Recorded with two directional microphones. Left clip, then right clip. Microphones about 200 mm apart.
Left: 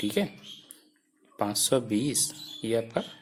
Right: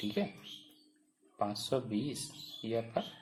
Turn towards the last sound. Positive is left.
turn(degrees=45)  # may be behind; listen again after turning